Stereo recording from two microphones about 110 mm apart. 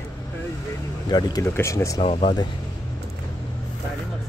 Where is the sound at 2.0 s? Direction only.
55° left (ahead or behind).